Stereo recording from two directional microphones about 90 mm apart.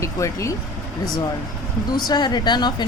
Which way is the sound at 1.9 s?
50° left (ahead or behind).